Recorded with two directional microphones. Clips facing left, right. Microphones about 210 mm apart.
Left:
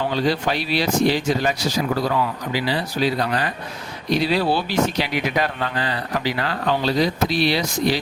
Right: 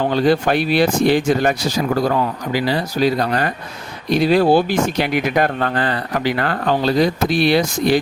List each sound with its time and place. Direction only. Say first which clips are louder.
0.0 s speech: right 5 dB; 55° right (ahead or behind)